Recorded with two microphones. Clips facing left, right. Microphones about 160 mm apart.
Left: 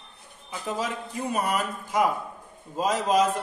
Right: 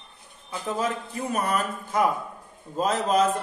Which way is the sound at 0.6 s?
10° left (ahead or behind).